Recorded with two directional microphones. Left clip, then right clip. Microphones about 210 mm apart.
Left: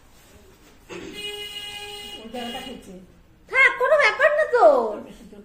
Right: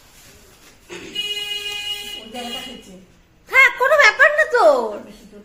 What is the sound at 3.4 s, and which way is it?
Chuckle, 20° right (ahead or behind).